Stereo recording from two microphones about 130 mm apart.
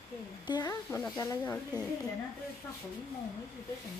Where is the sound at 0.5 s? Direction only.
30° left (ahead or behind).